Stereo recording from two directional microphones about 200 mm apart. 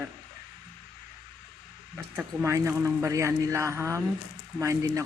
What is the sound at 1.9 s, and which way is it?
Speech, 10° right (ahead or behind).